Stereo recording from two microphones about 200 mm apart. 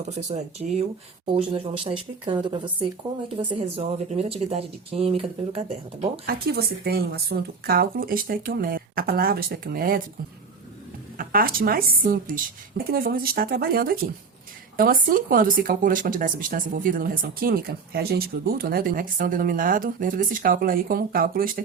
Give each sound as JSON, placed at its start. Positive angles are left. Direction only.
{"t": 0.1, "sound": "speech", "side_deg": -35}
{"t": 6.2, "sound": "speech", "side_deg": -50}
{"t": 11.2, "sound": "speech", "side_deg": -45}